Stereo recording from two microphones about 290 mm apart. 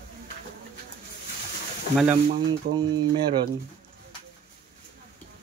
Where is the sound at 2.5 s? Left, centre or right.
Centre.